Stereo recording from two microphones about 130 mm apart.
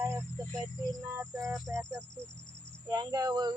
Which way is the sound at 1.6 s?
20° right (ahead or behind).